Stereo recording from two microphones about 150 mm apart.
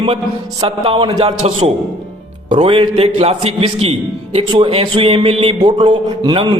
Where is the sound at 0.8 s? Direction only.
30° right (ahead or behind).